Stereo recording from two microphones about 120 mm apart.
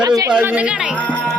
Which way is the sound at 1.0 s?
10° left (ahead or behind).